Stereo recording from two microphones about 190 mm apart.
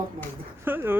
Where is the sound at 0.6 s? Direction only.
10° right (ahead or behind).